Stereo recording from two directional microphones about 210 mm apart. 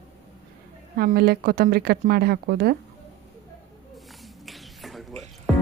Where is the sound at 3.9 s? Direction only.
Centre (ahead or behind).